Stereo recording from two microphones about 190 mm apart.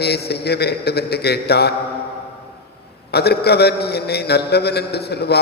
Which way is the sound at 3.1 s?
60° left (ahead or behind).